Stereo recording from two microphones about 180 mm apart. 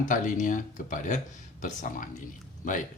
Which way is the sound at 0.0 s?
45° left (ahead or behind).